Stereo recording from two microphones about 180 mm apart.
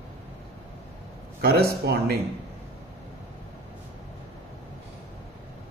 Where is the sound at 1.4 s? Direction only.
60° right (ahead or behind).